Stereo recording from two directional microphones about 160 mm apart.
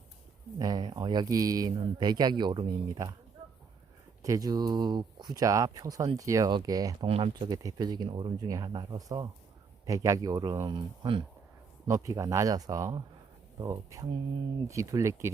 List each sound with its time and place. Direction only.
0.6 s speech: 25° right (ahead or behind)
4.2 s speech: 20° right (ahead or behind)
11.9 s speech: 20° right (ahead or behind)